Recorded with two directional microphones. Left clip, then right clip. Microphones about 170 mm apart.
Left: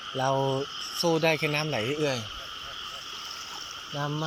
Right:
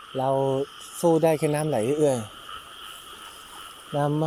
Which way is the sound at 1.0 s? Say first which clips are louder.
Right 4 dB; 35° right (ahead or behind).